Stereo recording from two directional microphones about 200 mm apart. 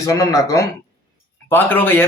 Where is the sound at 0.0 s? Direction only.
15° left (ahead or behind).